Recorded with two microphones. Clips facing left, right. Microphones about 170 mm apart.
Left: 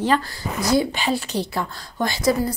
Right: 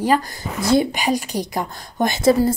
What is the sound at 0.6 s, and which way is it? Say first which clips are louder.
A woman's voice: right 3 dB; 25° right (ahead or behind).